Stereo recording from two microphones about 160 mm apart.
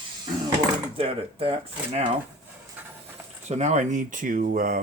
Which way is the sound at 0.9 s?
35° right (ahead or behind).